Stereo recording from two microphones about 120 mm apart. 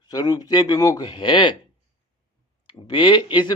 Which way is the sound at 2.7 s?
40° left (ahead or behind).